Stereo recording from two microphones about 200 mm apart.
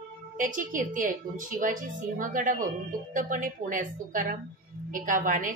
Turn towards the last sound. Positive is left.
turn(degrees=-40)  # may be behind; listen again after turning